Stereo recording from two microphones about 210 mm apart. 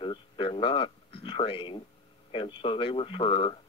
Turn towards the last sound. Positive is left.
turn(degrees=25)  # may be behind; listen again after turning